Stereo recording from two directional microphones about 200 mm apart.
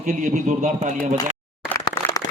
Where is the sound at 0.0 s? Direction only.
40° right (ahead or behind).